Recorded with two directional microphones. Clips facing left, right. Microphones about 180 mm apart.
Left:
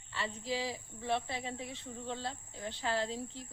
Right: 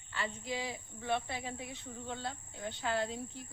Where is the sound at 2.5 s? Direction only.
Centre (ahead or behind).